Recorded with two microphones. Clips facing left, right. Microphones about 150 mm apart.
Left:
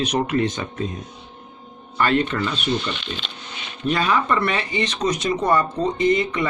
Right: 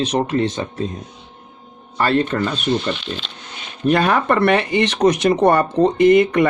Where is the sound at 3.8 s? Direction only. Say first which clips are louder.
Right 5 dB; 55° right (ahead or behind).